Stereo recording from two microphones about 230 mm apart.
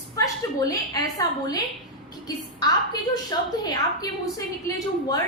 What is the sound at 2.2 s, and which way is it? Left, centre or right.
A woman's voice, centre.